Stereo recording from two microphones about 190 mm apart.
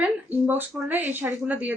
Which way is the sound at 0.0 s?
10° right (ahead or behind).